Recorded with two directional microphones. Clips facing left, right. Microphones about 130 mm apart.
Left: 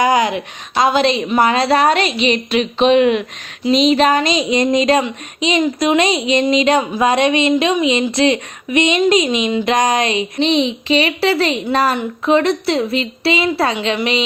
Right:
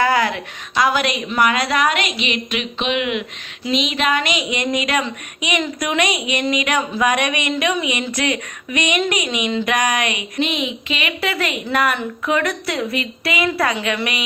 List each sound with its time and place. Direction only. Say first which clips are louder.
0.0 s a woman's voice: left 3 dB; 20° left (ahead or behind)